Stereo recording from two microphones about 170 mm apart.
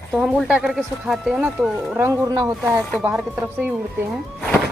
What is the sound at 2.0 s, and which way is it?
A woman's voice, 20° right (ahead or behind).